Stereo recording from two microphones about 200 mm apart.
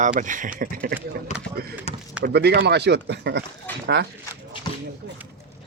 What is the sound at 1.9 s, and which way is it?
Speech, 30° left (ahead or behind).